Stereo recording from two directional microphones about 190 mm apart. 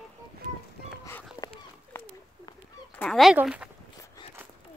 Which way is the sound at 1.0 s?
15° left (ahead or behind).